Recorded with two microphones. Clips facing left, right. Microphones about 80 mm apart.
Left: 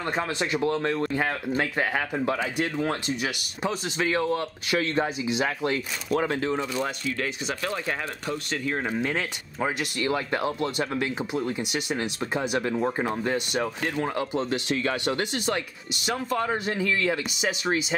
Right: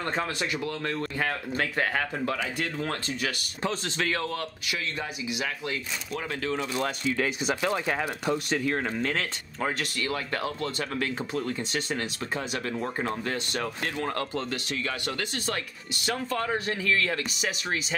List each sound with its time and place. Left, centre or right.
0.0 s speech: centre
4.6 s speech: left
7.2 s speech: centre
8.8 s speech: centre
9.9 s speech: left
14.8 s speech: left